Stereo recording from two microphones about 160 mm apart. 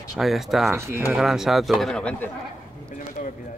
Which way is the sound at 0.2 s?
Centre (ahead or behind).